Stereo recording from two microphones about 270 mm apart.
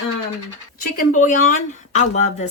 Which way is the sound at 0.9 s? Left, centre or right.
Left.